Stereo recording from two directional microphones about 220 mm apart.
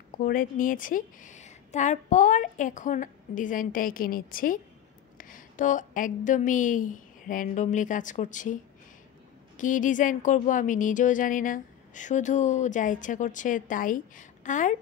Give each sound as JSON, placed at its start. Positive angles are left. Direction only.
{"t": 0.2, "sound": "a woman's voice", "side_deg": 40}
{"t": 9.6, "sound": "speech", "side_deg": 35}